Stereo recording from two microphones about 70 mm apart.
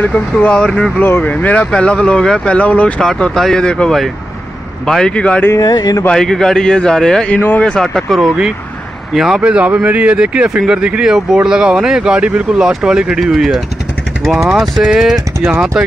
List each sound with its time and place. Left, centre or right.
0.0 s speech: left
0.6 s speech: centre
1.0 s speech: left
3.0 s speech: centre
5.6 s speech: left
6.1 s speech: centre
9.4 s speech: centre